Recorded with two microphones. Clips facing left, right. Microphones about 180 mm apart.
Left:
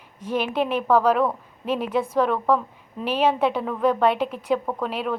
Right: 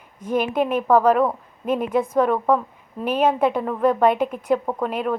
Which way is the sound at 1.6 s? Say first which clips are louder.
Right 3 dB; 50° right (ahead or behind).